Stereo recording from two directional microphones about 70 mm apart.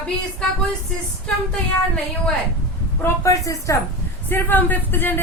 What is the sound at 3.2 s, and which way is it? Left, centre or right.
Speech, left.